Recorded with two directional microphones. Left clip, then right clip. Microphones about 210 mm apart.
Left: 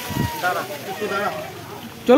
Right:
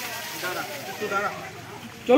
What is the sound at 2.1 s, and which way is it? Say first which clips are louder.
Speech: left 4 dB; 20° left (ahead or behind).